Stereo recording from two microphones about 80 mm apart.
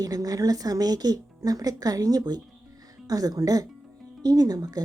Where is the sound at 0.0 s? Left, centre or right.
Right.